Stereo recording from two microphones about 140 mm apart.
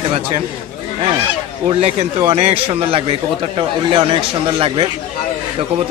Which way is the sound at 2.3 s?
45° right (ahead or behind).